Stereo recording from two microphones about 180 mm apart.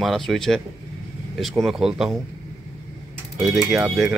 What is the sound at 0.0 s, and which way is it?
Speech, centre (ahead or behind).